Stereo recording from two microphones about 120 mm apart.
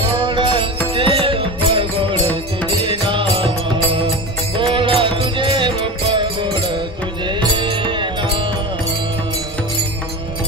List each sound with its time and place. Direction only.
0.2 s music: 45° right (ahead or behind)